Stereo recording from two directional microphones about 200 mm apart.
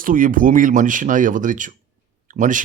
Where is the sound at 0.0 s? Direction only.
45° right (ahead or behind).